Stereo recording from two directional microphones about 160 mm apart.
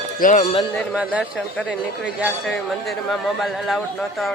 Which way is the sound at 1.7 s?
5° right (ahead or behind).